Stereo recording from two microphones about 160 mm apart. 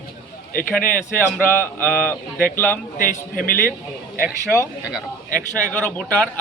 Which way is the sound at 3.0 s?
65° left (ahead or behind).